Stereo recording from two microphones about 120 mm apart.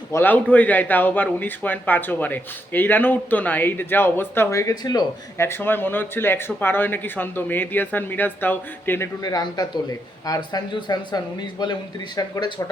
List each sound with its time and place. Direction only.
0.1 s a man's voice: 15° left (ahead or behind); by 5.0 s 35° left (ahead or behind)
5.4 s a man's voice: 20° left (ahead or behind)
9.2 s speech: 35° left (ahead or behind)